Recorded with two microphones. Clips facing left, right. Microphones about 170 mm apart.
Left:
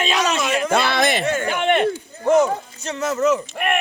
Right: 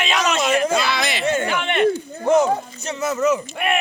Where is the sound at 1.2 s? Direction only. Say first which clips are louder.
Right 1 dB; 25° right (ahead or behind).